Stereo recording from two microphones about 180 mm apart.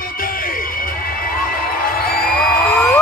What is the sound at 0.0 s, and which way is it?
Music, 50° left (ahead or behind).